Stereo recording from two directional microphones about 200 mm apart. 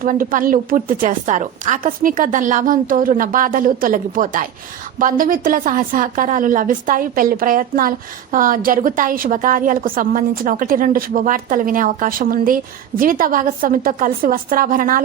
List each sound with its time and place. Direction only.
0.0 s a woman's voice: 45° right (ahead or behind)